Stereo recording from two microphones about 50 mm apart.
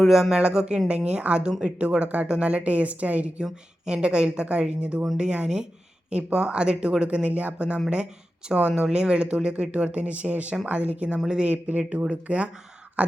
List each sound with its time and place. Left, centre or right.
0.0 s speech: centre; by 3.4 s right
3.4 s speech: centre
11.5 s speech: right
13.0 s throat clearing: right